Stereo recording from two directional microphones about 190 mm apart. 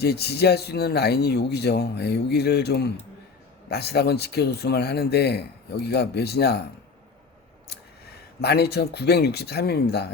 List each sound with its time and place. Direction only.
0.0 s speech: 60° left (ahead or behind)
8.4 s speech: 60° left (ahead or behind)